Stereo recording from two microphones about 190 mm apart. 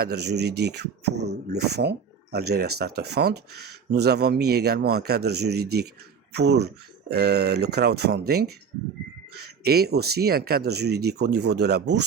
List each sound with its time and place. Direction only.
0.0 s speech: 60° right (ahead or behind)